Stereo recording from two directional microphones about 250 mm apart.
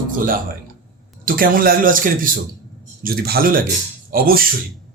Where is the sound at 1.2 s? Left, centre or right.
Right.